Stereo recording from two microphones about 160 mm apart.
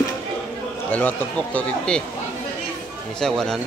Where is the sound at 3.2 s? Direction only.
5° left (ahead or behind).